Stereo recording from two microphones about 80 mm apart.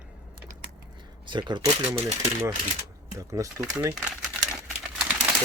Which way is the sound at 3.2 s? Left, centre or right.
Right.